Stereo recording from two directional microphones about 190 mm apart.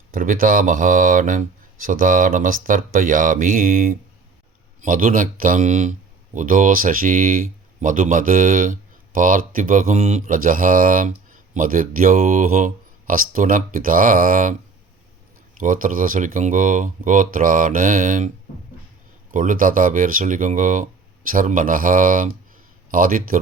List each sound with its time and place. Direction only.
0.1 s speech: 45° right (ahead or behind)
15.5 s speech: 45° right (ahead or behind)
19.3 s speech: 45° right (ahead or behind)